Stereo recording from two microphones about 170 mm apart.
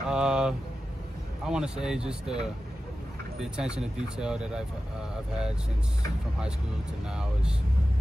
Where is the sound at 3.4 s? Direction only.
5° right (ahead or behind).